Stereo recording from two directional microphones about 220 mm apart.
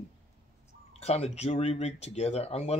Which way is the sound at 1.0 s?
30° left (ahead or behind).